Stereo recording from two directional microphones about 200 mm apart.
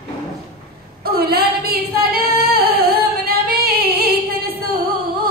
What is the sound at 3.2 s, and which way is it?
Female singing, 50° right (ahead or behind).